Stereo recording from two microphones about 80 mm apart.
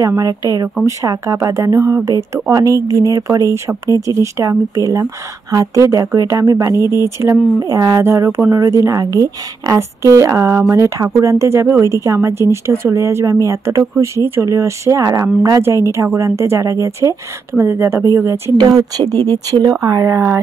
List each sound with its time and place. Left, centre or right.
0.0 s speech: right
1.8 s speech: right
8.0 s speech: right
18.6 s speech: right